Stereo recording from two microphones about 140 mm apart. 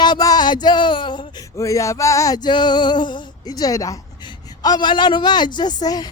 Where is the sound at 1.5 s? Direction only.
20° left (ahead or behind).